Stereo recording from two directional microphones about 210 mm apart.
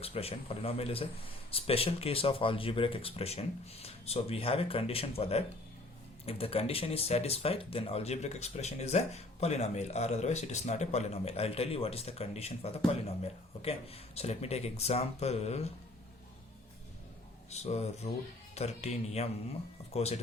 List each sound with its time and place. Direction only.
0.0 s speech: 30° left (ahead or behind)
17.5 s a man's voice: 30° left (ahead or behind)